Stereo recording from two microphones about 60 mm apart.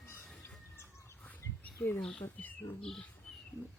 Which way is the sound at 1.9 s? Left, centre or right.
Centre.